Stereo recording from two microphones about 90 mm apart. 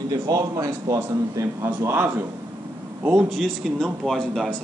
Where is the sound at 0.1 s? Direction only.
40° right (ahead or behind); by 2.2 s 20° right (ahead or behind).